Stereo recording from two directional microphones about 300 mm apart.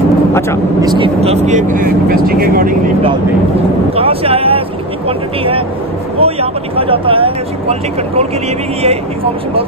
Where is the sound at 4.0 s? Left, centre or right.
Centre.